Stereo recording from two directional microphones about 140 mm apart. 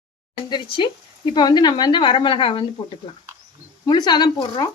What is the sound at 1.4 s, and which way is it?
Speech, 30° left (ahead or behind).